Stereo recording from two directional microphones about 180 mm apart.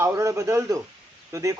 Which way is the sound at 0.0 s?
15° right (ahead or behind).